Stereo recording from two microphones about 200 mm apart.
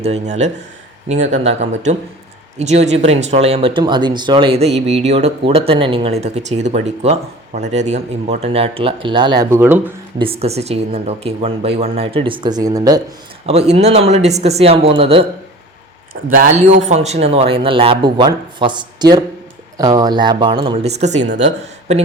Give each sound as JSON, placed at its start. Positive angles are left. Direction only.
{"t": 0.0, "sound": "speech", "side_deg": -35}
{"t": 10.2, "sound": "speech", "side_deg": -30}
{"t": 13.4, "sound": "speech", "side_deg": -30}
{"t": 16.1, "sound": "speech", "side_deg": -55}
{"t": 16.8, "sound": "speech", "side_deg": -35}